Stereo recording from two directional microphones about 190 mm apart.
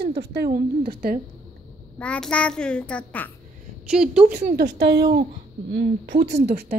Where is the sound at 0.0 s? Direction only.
60° right (ahead or behind).